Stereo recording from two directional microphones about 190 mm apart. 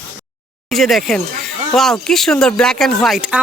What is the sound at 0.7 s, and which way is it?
Speech, centre (ahead or behind).